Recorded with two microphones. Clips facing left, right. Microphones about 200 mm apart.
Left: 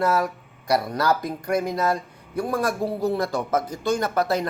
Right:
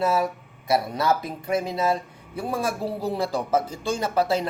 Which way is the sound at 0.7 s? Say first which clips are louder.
Left 1 dB; centre (ahead or behind).